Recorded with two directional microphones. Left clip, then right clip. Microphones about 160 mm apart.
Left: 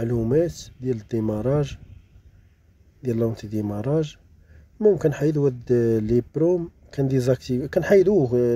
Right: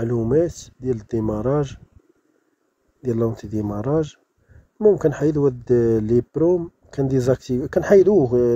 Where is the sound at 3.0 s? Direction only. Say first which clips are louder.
Right 2 dB; centre (ahead or behind).